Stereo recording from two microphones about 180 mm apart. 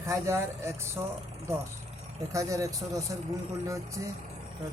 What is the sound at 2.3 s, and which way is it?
Speech, 15° right (ahead or behind).